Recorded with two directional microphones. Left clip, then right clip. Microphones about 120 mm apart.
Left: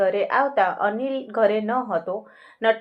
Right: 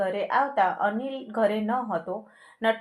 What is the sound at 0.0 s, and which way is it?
Speech, 25° left (ahead or behind).